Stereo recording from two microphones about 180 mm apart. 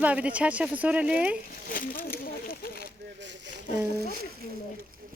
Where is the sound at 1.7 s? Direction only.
50° left (ahead or behind).